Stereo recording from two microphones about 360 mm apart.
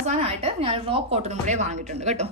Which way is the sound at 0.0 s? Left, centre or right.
Centre.